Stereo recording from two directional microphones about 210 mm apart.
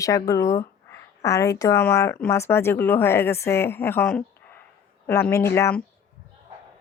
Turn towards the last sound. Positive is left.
turn(degrees=10)  # may be behind; listen again after turning